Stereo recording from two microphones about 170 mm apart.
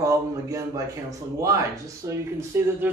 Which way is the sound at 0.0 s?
20° right (ahead or behind).